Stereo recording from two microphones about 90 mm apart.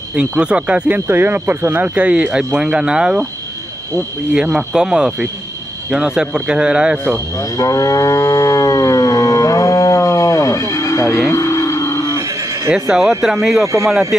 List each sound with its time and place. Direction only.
0.1 s speech: 10° right (ahead or behind)
4.3 s speech: 10° right (ahead or behind)
7.3 s livestock: 40° left (ahead or behind)
12.7 s speech: 5° right (ahead or behind)